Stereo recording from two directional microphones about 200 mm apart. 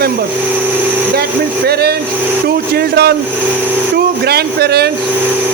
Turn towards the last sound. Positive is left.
turn(degrees=-55)  # may be behind; listen again after turning